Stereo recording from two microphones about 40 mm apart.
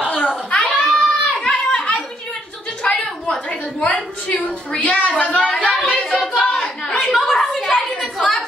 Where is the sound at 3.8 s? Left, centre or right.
Left.